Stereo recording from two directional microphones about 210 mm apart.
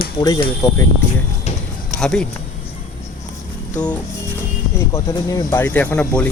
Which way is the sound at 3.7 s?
5° left (ahead or behind).